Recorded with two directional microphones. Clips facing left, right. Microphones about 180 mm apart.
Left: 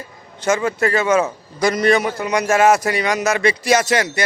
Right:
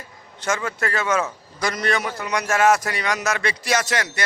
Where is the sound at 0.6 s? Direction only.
10° left (ahead or behind).